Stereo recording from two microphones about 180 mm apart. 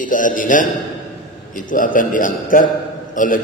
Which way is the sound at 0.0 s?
50° left (ahead or behind).